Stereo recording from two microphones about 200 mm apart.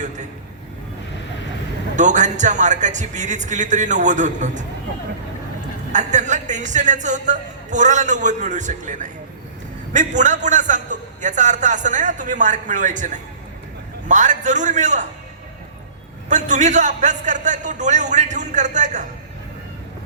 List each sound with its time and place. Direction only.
2.0 s speech: 35° right (ahead or behind)
5.9 s speech: 35° right (ahead or behind)
16.3 s speech: 35° right (ahead or behind)